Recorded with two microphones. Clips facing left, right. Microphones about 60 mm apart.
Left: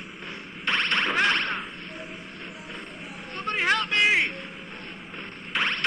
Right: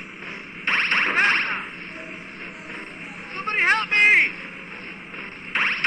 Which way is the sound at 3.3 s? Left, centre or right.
Right.